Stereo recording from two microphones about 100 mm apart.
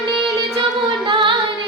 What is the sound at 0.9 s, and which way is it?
Singing, 50° right (ahead or behind).